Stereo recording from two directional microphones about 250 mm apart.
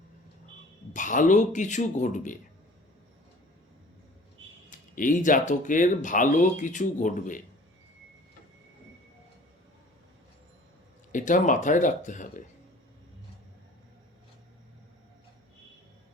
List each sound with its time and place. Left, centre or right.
0.9 s speech: left
4.9 s speech: left
11.1 s speech: left